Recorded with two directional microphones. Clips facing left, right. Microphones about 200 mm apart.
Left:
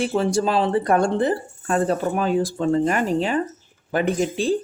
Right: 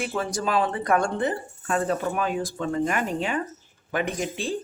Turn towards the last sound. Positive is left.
turn(degrees=35)  # may be behind; listen again after turning